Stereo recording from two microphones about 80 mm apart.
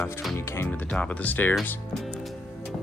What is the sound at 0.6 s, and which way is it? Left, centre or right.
Speech, centre.